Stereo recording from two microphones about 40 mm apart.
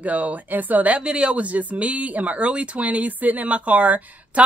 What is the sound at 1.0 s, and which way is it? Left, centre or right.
Speech, right.